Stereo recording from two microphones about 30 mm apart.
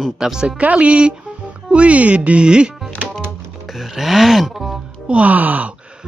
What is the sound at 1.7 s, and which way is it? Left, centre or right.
Speech, right.